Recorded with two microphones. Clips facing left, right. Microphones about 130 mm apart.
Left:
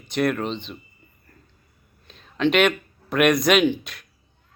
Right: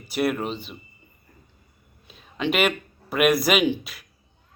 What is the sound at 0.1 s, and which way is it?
Speech, 5° right (ahead or behind).